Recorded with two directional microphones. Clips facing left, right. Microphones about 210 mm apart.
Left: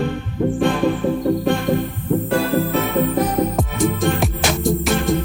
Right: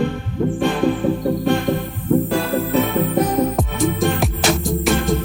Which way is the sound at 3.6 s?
Centre (ahead or behind).